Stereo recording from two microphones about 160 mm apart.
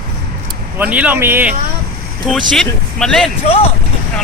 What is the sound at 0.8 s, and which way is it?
Speech, 10° right (ahead or behind).